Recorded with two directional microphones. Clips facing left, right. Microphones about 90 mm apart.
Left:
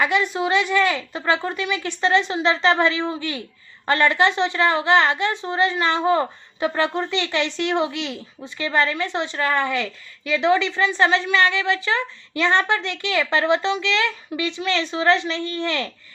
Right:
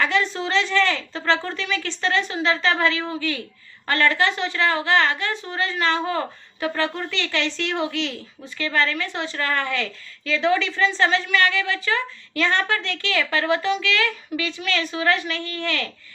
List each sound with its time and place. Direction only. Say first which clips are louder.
0.0 s a woman's voice: left 2 dB; 15° left (ahead or behind)